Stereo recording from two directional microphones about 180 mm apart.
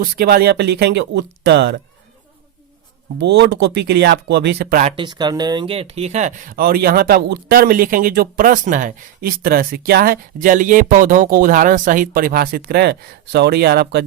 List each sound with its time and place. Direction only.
0.0 s speech: 55° right (ahead or behind)
3.2 s speech: 65° right (ahead or behind)
4.9 s speech: 25° right (ahead or behind); by 6.6 s 40° right (ahead or behind)
6.6 s speech: 55° right (ahead or behind)